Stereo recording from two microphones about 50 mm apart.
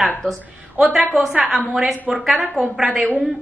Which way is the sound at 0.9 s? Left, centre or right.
Centre.